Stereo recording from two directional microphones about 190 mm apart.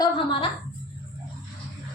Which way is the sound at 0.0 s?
25° left (ahead or behind).